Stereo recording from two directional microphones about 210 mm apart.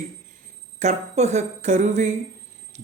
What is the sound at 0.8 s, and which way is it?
Speech, 35° right (ahead or behind).